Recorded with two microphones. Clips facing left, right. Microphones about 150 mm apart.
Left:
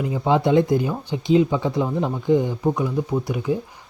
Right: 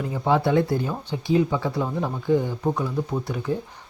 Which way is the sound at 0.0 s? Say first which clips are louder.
Left 2 dB; 15° left (ahead or behind).